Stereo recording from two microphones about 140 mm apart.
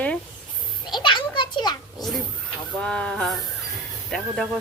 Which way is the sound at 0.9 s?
35° left (ahead or behind).